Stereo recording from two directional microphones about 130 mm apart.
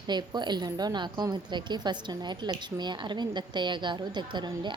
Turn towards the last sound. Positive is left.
turn(degrees=-35)  # may be behind; listen again after turning